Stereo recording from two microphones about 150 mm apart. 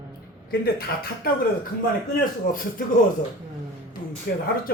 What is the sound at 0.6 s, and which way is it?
Speech, 90° left.